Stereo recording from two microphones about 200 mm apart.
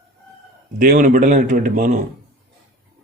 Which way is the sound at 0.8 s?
45° right (ahead or behind).